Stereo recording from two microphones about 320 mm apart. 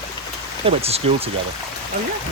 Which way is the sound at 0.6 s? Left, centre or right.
Centre.